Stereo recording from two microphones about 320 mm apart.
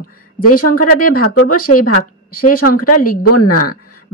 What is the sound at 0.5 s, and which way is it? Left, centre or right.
A woman's voice, left.